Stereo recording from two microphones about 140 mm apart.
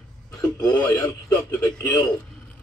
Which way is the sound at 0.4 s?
25° left (ahead or behind).